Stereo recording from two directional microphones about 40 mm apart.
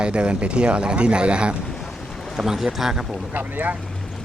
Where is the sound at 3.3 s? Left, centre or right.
Right.